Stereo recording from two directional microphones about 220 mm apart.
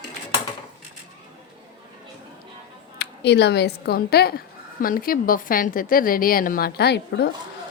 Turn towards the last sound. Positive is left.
turn(degrees=50)  # may be behind; listen again after turning